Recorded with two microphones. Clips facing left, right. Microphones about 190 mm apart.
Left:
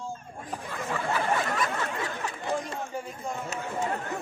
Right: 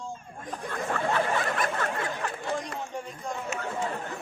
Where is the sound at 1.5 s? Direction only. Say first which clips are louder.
Right 1 dB; 55° right (ahead or behind).